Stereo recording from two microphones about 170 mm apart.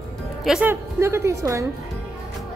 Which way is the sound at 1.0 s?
15° right (ahead or behind).